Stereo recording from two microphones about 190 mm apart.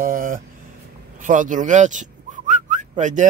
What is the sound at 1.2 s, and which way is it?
Whistling, 45° right (ahead or behind).